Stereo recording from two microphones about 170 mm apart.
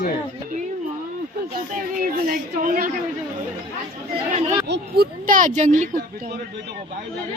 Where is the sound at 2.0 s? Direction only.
55° right (ahead or behind).